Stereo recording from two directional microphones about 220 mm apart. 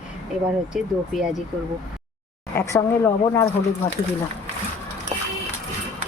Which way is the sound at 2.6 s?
15° left (ahead or behind).